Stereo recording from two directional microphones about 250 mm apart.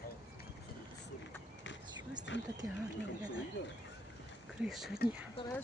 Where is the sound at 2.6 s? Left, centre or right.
Centre.